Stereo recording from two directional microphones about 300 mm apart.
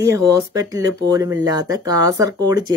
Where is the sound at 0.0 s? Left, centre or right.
Centre.